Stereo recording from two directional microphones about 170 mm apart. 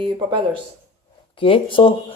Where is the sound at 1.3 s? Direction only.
30° left (ahead or behind).